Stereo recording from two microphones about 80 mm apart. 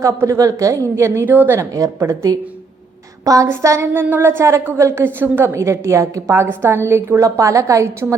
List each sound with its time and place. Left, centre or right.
0.0 s a woman's voice: right
1.2 s a woman's voice: right
1.5 s a woman's voice: right
3.2 s a sound: right
3.5 s a woman's voice: right